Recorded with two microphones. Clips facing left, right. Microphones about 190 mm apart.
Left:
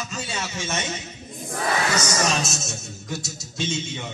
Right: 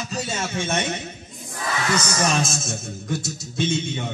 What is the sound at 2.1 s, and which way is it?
A man's voice, 55° right (ahead or behind).